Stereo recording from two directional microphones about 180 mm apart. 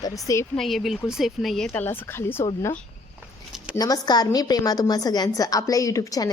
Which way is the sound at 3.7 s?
20° left (ahead or behind).